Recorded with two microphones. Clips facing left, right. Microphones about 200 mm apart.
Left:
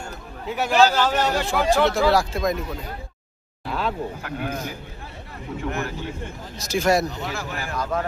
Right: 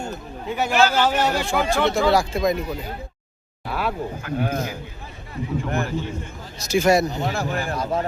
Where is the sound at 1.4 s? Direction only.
Centre (ahead or behind).